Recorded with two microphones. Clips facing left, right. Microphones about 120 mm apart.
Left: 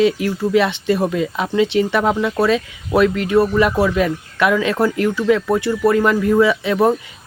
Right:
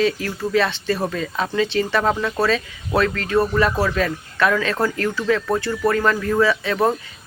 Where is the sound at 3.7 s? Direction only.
20° left (ahead or behind).